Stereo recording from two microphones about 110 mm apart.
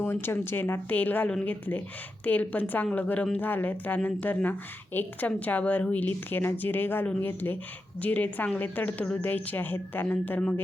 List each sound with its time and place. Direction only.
0.0 s a woman's voice: 20° left (ahead or behind)